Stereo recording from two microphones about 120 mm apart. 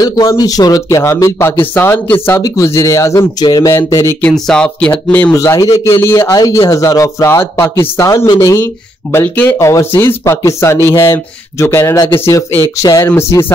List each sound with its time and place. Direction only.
0.0 s a man's voice: 30° left (ahead or behind)
4.2 s speech: 10° left (ahead or behind)
5.3 s a man's voice: 25° left (ahead or behind)
9.1 s a man's voice: 15° left (ahead or behind)